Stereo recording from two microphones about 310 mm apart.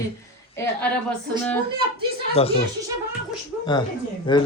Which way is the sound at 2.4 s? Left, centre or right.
Centre.